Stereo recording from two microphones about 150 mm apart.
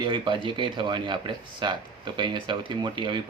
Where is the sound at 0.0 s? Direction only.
35° right (ahead or behind).